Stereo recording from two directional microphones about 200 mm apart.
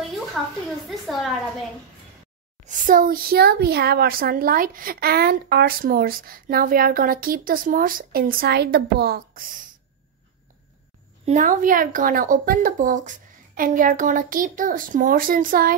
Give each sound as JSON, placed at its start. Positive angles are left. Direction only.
{"t": 0.8, "sound": "a woman's voice", "side_deg": 0}
{"t": 2.6, "sound": "speech", "side_deg": -45}
{"t": 11.2, "sound": "speech", "side_deg": -40}